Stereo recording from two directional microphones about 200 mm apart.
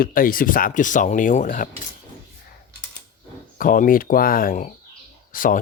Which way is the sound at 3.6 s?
40° left (ahead or behind).